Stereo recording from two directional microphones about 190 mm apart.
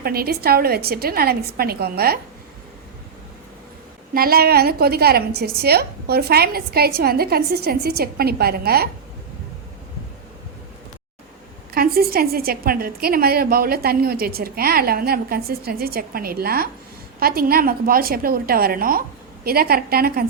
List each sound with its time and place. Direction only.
0.0 s a woman's voice: 50° right (ahead or behind)
4.1 s a woman's voice: 50° right (ahead or behind)
11.7 s a woman's voice: 50° right (ahead or behind)